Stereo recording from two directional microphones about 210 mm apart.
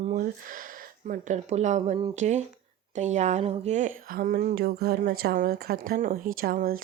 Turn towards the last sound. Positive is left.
turn(degrees=-45)  # may be behind; listen again after turning